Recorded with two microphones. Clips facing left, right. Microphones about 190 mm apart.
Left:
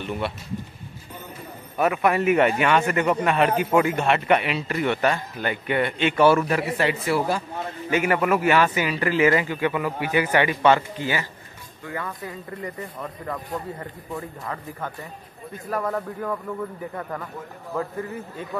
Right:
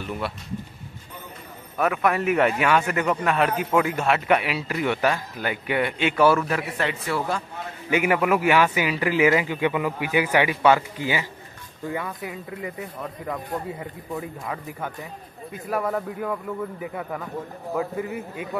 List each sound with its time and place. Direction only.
0.0 s a man's voice: centre (ahead or behind)
1.8 s a man's voice: 5° left (ahead or behind)
7.9 s speech: 10° right (ahead or behind)
12.1 s speech: 5° right (ahead or behind)